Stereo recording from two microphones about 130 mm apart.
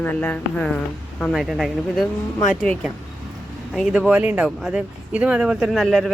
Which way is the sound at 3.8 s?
5° right (ahead or behind).